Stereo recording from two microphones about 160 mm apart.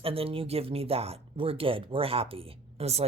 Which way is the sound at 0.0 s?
35° right (ahead or behind).